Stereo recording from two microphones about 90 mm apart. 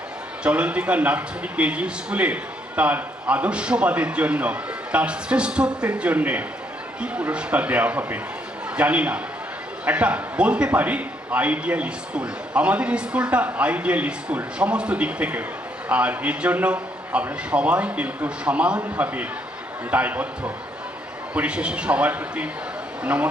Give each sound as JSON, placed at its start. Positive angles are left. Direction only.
{"t": 0.4, "sound": "a man's voice", "side_deg": -15}